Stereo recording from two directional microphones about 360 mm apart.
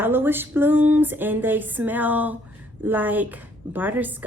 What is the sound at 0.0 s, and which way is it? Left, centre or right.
Speech, centre.